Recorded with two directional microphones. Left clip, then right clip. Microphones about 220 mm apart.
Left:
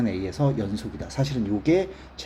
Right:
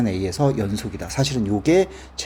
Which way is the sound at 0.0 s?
30° right (ahead or behind).